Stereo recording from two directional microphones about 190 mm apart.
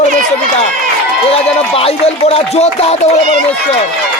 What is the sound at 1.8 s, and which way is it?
Speech, 30° left (ahead or behind).